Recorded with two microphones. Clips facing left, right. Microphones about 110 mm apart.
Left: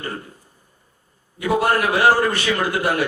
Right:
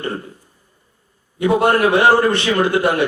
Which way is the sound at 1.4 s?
25° right (ahead or behind).